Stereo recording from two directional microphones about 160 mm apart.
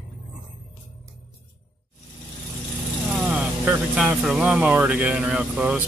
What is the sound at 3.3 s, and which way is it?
Speech, 10° right (ahead or behind).